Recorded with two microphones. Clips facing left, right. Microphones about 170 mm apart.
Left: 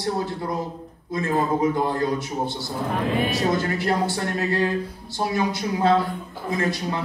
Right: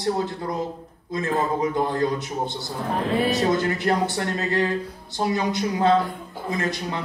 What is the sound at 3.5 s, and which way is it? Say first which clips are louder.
Speech: right 1 dB; 20° right (ahead or behind).